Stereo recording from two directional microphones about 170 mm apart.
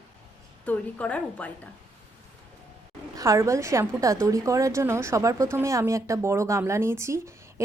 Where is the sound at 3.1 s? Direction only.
20° right (ahead or behind).